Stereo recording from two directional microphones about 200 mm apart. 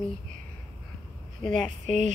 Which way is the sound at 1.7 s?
35° right (ahead or behind).